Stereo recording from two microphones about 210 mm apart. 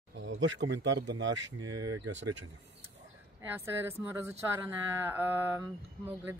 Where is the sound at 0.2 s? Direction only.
60° right (ahead or behind).